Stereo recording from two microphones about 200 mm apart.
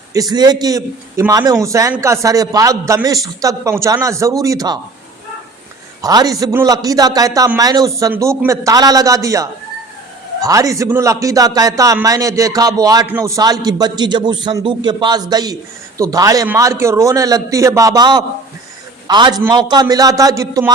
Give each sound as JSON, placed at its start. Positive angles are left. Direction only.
{"t": 0.1, "sound": "a man's voice", "side_deg": -20}
{"t": 6.0, "sound": "a man's voice", "side_deg": -20}